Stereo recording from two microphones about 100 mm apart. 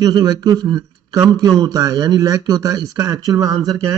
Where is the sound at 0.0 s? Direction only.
40° right (ahead or behind).